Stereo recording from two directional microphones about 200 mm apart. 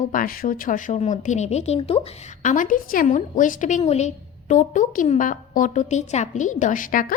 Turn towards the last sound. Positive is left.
turn(degrees=45)  # may be behind; listen again after turning